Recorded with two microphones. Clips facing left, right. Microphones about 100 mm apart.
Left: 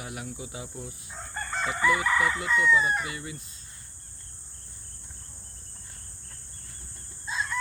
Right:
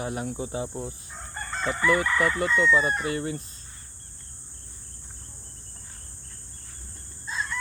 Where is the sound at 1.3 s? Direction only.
5° left (ahead or behind).